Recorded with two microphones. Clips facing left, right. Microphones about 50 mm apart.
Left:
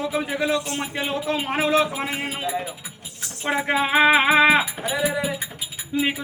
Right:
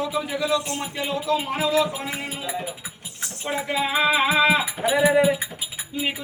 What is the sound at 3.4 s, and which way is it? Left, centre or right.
Speech, left.